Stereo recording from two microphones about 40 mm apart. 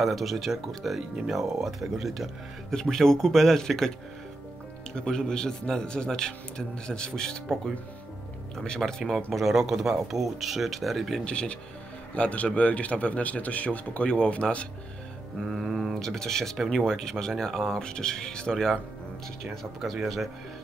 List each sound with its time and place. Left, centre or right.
0.0 s speech: centre
2.7 s speech: centre
5.0 s speech: centre
9.0 s speech: centre
11.2 s a man's voice: left
15.5 s speech: centre
19.8 s speech: centre